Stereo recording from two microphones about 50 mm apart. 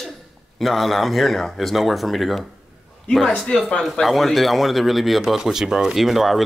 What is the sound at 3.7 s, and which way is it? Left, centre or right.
Speech, centre.